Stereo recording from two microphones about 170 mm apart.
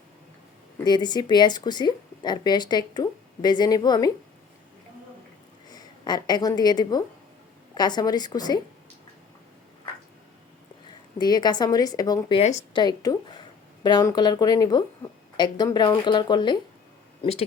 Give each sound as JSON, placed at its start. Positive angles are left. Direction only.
{"t": 0.9, "sound": "speech", "side_deg": 25}
{"t": 5.6, "sound": "a woman's voice", "side_deg": 25}
{"t": 10.8, "sound": "a woman's voice", "side_deg": 25}
{"t": 12.4, "sound": "a woman's voice", "side_deg": 40}
{"t": 12.7, "sound": "speech", "side_deg": 25}